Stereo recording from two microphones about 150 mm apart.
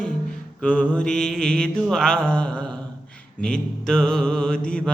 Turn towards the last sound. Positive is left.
turn(degrees=5)  # may be behind; listen again after turning